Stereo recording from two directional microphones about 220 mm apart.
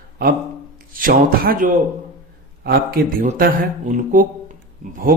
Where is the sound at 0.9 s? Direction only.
40° right (ahead or behind).